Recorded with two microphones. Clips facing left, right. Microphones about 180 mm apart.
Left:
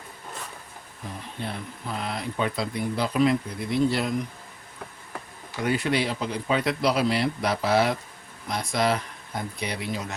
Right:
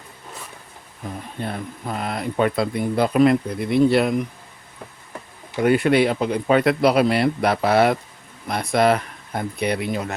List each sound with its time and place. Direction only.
1.4 s speech: 50° right (ahead or behind)
5.6 s speech: 60° right (ahead or behind)